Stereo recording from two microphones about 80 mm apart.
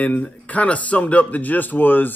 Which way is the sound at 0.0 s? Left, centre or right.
Left.